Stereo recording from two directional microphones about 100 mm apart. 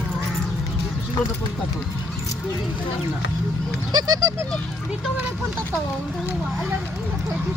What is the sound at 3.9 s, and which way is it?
Speech, 35° right (ahead or behind).